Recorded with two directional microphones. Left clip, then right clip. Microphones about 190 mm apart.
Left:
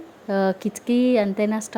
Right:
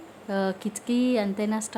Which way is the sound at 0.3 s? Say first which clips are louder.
Left 6 dB; 25° left (ahead or behind).